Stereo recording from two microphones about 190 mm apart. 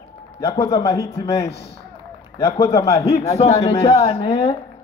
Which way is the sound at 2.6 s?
15° left (ahead or behind).